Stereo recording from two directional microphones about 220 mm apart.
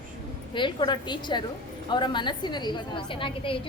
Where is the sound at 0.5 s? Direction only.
20° left (ahead or behind).